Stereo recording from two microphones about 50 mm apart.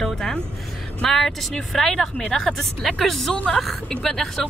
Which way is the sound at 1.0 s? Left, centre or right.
Centre.